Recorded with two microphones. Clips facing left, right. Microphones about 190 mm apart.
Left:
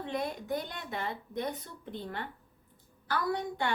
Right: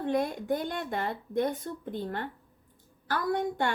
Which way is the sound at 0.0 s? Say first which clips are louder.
Right 6 dB; 50° right (ahead or behind).